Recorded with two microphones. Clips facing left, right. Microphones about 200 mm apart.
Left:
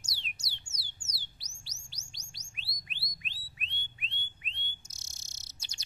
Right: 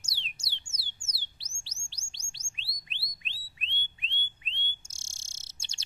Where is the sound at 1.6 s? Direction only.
30° right (ahead or behind).